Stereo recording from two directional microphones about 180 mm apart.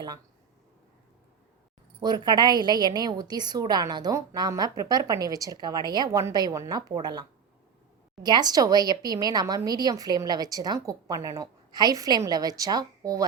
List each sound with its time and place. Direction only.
2.0 s a woman's voice: 25° right (ahead or behind)